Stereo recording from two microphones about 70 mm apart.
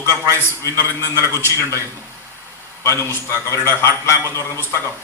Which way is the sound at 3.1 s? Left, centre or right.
Left.